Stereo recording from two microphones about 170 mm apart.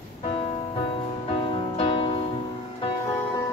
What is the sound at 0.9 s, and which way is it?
Music, 35° left (ahead or behind).